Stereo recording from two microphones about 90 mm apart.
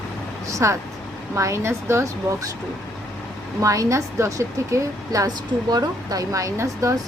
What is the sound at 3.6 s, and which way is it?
A woman's voice, 35° right (ahead or behind).